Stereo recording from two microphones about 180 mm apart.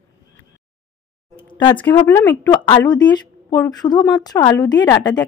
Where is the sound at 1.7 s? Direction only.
10° left (ahead or behind).